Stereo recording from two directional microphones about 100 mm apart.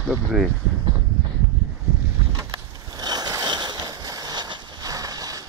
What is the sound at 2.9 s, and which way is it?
Vehicle, 40° right (ahead or behind).